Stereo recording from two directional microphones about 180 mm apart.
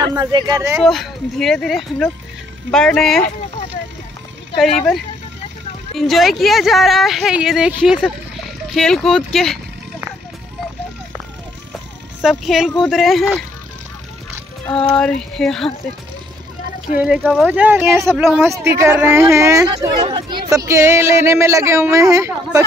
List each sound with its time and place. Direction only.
0.1 s speech: 25° right (ahead or behind)
0.7 s speech: centre (ahead or behind)
5.9 s speech: centre (ahead or behind)
12.2 s speech: centre (ahead or behind)
14.9 s speech: 5° left (ahead or behind)
17.0 s speech: 5° right (ahead or behind)